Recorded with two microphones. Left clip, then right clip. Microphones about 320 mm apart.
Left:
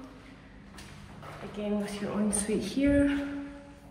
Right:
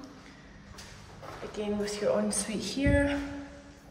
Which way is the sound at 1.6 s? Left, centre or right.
Right.